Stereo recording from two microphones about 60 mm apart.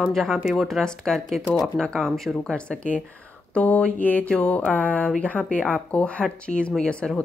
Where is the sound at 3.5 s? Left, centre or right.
Left.